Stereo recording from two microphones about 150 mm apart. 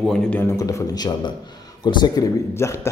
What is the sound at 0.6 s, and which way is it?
A man's voice, 25° left (ahead or behind).